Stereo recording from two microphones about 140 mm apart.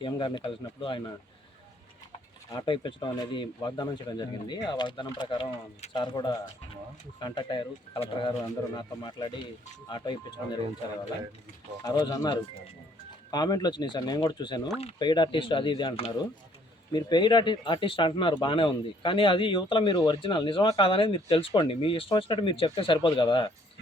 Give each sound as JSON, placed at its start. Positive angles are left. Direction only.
{"t": 0.0, "sound": "speech", "side_deg": 35}
{"t": 2.5, "sound": "speech", "side_deg": 35}
{"t": 11.9, "sound": "speech", "side_deg": 25}